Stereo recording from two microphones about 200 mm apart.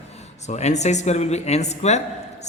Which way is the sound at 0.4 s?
35° left (ahead or behind).